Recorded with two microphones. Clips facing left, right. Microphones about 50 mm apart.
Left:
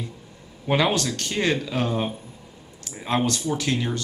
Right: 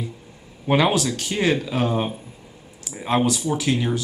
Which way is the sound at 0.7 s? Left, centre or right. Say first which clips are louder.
Right 3 dB; centre.